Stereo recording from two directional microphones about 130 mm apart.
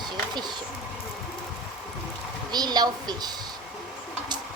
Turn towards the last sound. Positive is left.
turn(degrees=-30)  # may be behind; listen again after turning